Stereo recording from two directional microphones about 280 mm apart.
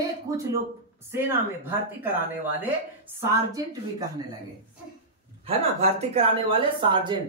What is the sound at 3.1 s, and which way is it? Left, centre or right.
Speech, centre.